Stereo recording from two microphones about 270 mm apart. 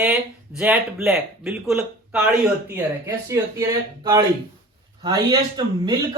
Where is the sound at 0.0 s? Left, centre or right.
Centre.